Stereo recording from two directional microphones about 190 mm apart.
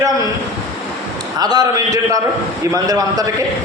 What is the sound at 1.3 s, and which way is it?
Speech, 20° right (ahead or behind).